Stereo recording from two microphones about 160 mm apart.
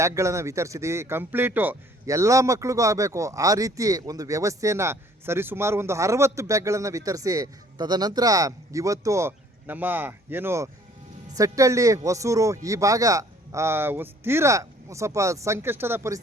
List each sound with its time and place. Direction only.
0.0 s speech: 20° right (ahead or behind)